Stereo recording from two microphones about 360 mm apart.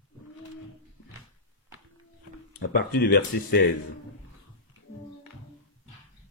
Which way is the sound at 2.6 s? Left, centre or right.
Left.